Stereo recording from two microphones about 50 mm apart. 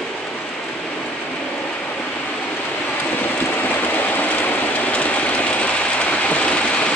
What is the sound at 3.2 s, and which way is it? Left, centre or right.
Train, left.